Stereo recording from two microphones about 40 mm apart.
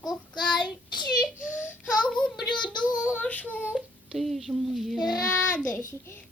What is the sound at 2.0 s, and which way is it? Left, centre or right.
Child singing, centre.